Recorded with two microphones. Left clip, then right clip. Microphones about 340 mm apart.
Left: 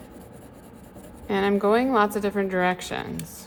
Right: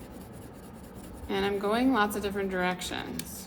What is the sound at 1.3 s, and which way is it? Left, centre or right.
A woman's voice, left.